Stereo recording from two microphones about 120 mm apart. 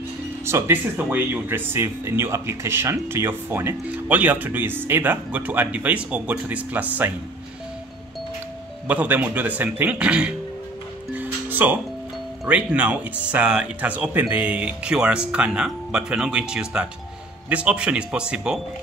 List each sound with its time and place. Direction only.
0.5 s speech: 20° right (ahead or behind)
8.8 s speech: 15° right (ahead or behind)
11.1 s music: 15° right (ahead or behind)
12.4 s speech: 10° right (ahead or behind)